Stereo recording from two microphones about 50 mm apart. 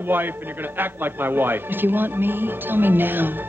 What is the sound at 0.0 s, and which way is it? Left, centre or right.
A man's voice, right.